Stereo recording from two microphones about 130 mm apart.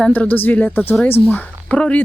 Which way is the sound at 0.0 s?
10° left (ahead or behind).